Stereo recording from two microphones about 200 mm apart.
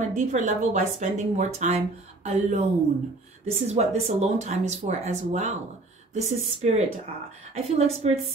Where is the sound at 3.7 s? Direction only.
35° right (ahead or behind).